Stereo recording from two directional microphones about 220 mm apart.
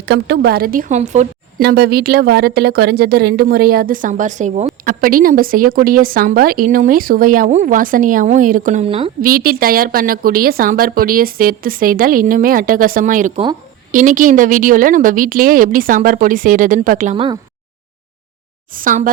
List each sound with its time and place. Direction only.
0.1 s speech: 50° right (ahead or behind); by 1.6 s 30° right (ahead or behind)
1.6 s speech: 45° right (ahead or behind); by 9.1 s 25° right (ahead or behind)
9.2 s speech: 40° right (ahead or behind)
18.7 s speech: 40° right (ahead or behind)